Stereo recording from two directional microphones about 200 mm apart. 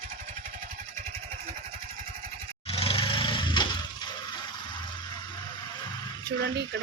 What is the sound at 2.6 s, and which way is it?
Lawn mower, 30° left (ahead or behind).